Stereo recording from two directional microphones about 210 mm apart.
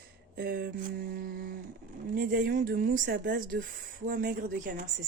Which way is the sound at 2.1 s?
40° right (ahead or behind).